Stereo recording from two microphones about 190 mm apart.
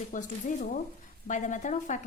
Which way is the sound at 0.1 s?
45° left (ahead or behind).